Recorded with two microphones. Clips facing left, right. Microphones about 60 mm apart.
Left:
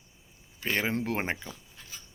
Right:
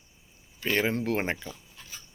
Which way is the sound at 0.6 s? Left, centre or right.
Centre.